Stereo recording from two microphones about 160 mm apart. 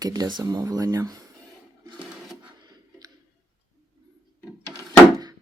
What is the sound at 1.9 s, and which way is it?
Sewing machine, 5° right (ahead or behind).